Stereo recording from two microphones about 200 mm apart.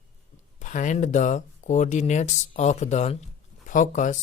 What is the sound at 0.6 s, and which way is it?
Speech, 40° left (ahead or behind).